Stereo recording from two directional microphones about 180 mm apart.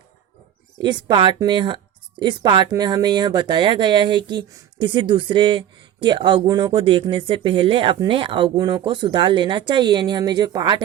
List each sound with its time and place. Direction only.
0.8 s speech: 25° right (ahead or behind)